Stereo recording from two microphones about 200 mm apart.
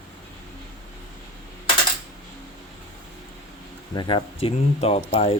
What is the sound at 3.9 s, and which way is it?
Speech, 20° left (ahead or behind).